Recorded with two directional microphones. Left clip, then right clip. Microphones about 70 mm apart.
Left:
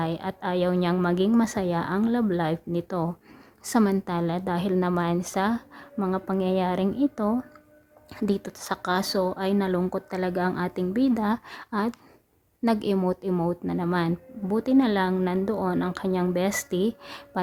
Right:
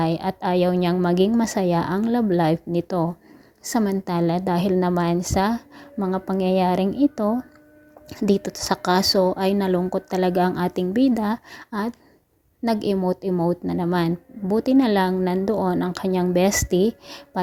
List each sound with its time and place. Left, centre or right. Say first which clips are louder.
0.0 s a woman's voice: right 6 dB; right
3.6 s a woman's voice: right 1 dB; centre
4.0 s a woman's voice: right 5 dB; right
8.2 s a woman's voice: right 7 dB; right
9.0 s a woman's voice: right 7 dB; right
10.9 s speech: right 3 dB; right
11.4 s a woman's voice: even; centre
13.5 s a woman's voice: right 5 dB; right
14.4 s a woman's voice: right 4 dB; right
16.9 s speech: right 2 dB; right